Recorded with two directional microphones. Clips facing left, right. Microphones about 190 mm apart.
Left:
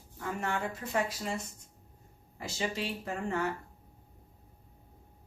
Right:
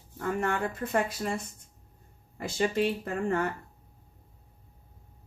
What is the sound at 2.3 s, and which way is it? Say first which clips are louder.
Speech: right 7 dB; 55° right (ahead or behind).